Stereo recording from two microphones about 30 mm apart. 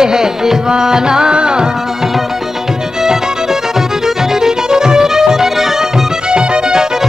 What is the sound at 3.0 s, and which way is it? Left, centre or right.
Music, centre.